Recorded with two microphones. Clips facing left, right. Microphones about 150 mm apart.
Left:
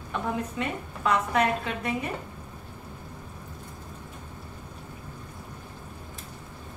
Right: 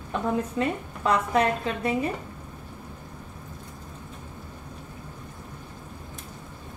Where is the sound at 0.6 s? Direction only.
35° right (ahead or behind).